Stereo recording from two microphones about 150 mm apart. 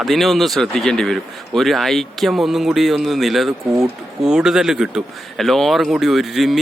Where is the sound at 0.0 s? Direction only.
Centre (ahead or behind).